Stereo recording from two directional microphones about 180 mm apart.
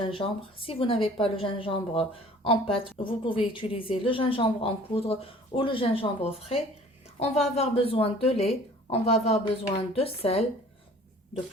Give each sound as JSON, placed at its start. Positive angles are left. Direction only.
{"t": 0.0, "sound": "a woman's voice", "side_deg": 30}